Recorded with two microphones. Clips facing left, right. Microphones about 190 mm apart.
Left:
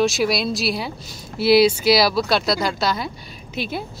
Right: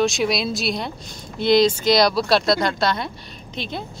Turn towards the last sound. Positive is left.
turn(degrees=5)  # may be behind; listen again after turning